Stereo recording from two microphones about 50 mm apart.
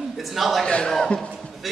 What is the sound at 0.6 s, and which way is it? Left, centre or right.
Speech, centre.